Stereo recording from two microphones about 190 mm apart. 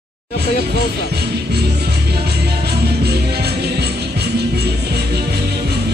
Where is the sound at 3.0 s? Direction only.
60° right (ahead or behind).